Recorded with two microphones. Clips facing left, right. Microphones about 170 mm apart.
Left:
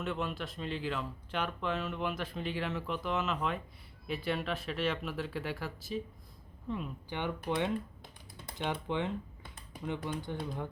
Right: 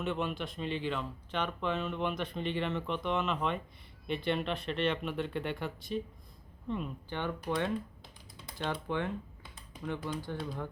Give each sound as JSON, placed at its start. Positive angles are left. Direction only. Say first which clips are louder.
{"t": 0.0, "sound": "speech", "louder": "right 2 dB", "side_deg": 0}
{"t": 7.1, "sound": "speech", "louder": "even", "side_deg": 15}